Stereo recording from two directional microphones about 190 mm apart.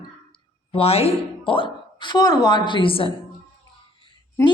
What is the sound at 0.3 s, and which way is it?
A woman's voice, 25° left (ahead or behind).